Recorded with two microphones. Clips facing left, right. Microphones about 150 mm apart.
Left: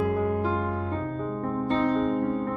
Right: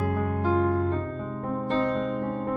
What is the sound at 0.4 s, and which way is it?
Music, centre (ahead or behind).